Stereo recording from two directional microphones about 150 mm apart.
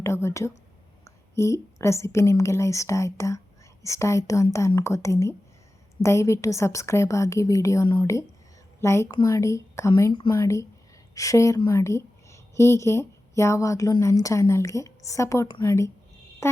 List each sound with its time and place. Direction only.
0.0 s a woman's voice: 20° left (ahead or behind)
10.1 s a woman's voice: 30° left (ahead or behind)
10.3 s a woman's voice: 20° left (ahead or behind)